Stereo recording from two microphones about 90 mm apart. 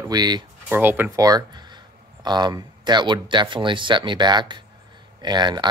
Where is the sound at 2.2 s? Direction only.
55° right (ahead or behind).